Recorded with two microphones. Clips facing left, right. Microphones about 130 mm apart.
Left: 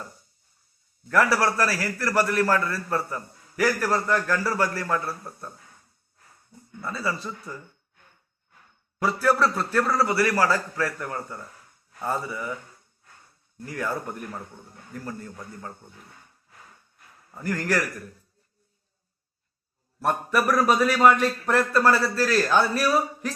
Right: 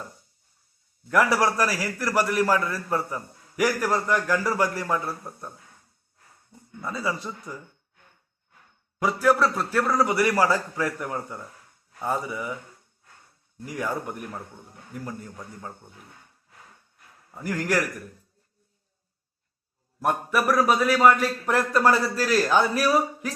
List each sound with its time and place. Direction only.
1.0 s a man's voice: 15° right (ahead or behind)
6.8 s a man's voice: 15° right (ahead or behind)
9.0 s a man's voice: 15° right (ahead or behind)
13.7 s a man's voice: 15° right (ahead or behind)
17.3 s a man's voice: 10° right (ahead or behind)
20.0 s a man's voice: 10° right (ahead or behind)